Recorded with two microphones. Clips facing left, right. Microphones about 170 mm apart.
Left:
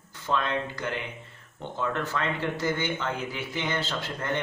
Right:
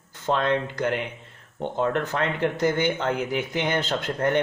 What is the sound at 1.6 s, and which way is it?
Speech, 60° right (ahead or behind).